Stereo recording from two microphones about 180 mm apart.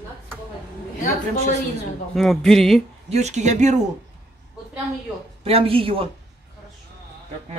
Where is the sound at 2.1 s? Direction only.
Centre (ahead or behind).